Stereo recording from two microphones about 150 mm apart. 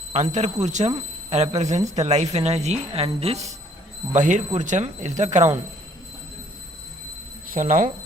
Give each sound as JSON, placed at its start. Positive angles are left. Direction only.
{"t": 0.1, "sound": "speech", "side_deg": -50}
{"t": 7.4, "sound": "speech", "side_deg": -65}